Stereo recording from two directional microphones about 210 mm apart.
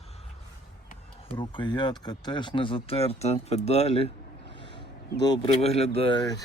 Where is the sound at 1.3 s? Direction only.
25° left (ahead or behind).